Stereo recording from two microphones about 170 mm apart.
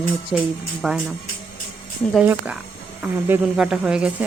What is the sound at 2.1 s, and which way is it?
Speech, 10° right (ahead or behind).